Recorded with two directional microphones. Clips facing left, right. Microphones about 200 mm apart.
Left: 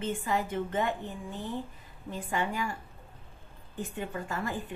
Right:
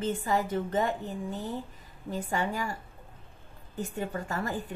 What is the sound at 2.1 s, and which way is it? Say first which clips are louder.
Speech: right 1 dB; 40° right (ahead or behind).